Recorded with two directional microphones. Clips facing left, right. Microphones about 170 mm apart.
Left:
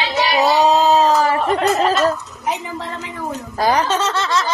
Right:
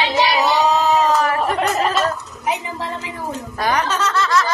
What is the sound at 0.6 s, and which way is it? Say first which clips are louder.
Speech: left 3 dB; 30° left (ahead or behind).